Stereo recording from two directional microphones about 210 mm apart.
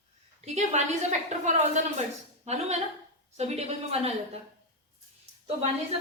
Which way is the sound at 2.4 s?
30° right (ahead or behind).